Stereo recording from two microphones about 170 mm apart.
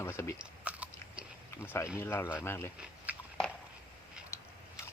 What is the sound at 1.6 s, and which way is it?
Speech, 15° left (ahead or behind).